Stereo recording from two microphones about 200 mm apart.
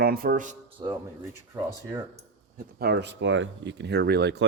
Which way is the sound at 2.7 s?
55° right (ahead or behind).